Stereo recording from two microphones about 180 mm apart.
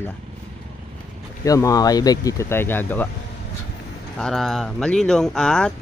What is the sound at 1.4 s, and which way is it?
Speech, 20° left (ahead or behind).